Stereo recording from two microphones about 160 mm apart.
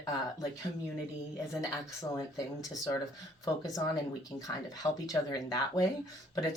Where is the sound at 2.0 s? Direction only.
20° left (ahead or behind).